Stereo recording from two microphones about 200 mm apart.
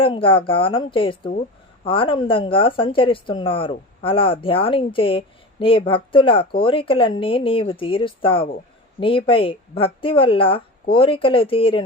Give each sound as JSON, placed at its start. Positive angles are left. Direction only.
{"t": 0.0, "sound": "speech", "side_deg": 25}